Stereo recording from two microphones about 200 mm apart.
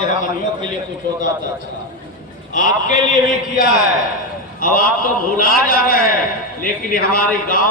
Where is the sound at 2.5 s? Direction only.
40° left (ahead or behind).